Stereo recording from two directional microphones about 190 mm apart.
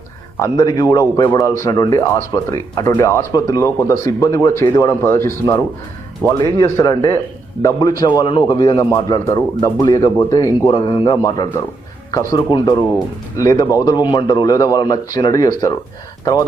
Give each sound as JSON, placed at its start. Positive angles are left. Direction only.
{"t": 0.4, "sound": "a man's voice", "side_deg": 20}